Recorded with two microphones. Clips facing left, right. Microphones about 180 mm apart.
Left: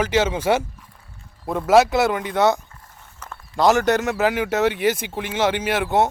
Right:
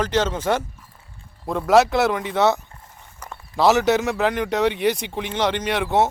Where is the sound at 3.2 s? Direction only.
10° right (ahead or behind).